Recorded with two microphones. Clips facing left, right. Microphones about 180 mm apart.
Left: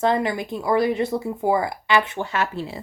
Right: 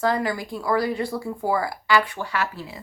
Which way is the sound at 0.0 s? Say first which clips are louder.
Left 2 dB; 25° left (ahead or behind).